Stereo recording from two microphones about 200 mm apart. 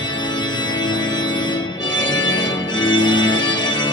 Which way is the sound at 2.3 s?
65° left (ahead or behind).